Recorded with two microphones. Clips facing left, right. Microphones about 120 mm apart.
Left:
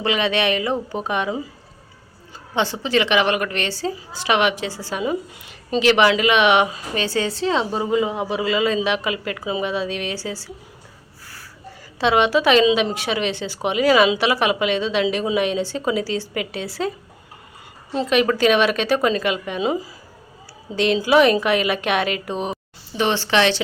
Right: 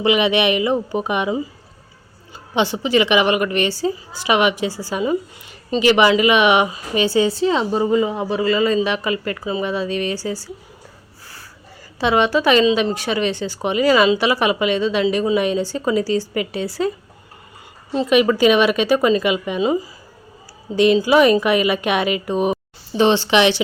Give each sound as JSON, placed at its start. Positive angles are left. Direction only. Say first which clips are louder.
{"t": 0.0, "sound": "speech", "louder": "right 4 dB", "side_deg": -15}
{"t": 2.6, "sound": "a woman's voice", "louder": "right 3 dB", "side_deg": -15}
{"t": 11.9, "sound": "a woman's voice", "louder": "even", "side_deg": 0}
{"t": 17.9, "sound": "a woman's voice", "louder": "right 3 dB", "side_deg": -5}
{"t": 23.0, "sound": "speech", "louder": "right 4 dB", "side_deg": -20}